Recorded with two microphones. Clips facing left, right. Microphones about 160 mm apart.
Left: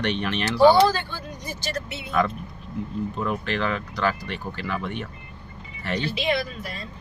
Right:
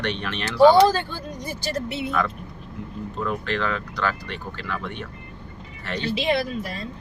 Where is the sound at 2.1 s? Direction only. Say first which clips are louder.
Left 4 dB; 20° left (ahead or behind).